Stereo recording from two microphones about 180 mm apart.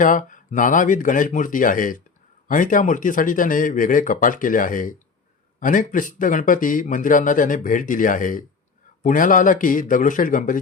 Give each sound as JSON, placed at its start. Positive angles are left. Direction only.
{"t": 0.0, "sound": "speech", "side_deg": 45}